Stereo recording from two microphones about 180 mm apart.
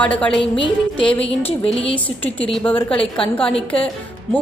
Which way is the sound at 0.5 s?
30° left (ahead or behind).